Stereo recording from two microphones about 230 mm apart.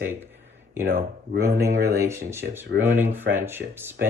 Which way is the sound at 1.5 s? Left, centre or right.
Centre.